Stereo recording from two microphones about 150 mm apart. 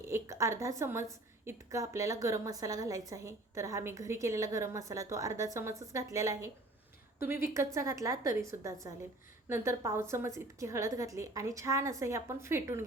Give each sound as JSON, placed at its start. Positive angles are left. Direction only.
{"t": 0.1, "sound": "a woman's voice", "side_deg": -20}